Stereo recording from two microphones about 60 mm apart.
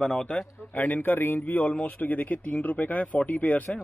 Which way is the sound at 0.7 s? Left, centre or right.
Left.